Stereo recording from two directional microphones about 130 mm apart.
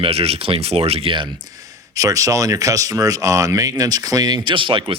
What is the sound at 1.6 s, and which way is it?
Speech, 25° right (ahead or behind).